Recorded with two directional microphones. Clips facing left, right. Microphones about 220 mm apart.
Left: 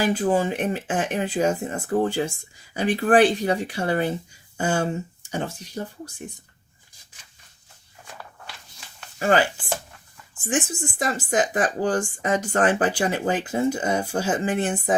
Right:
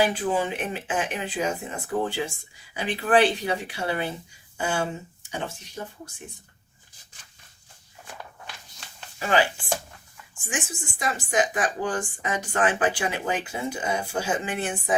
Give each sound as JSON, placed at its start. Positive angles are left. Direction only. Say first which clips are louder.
{"t": 0.0, "sound": "speech", "louder": "left 3 dB", "side_deg": 45}
{"t": 9.1, "sound": "speech", "louder": "left 4 dB", "side_deg": 50}
{"t": 10.5, "sound": "speech", "louder": "left 8 dB", "side_deg": 50}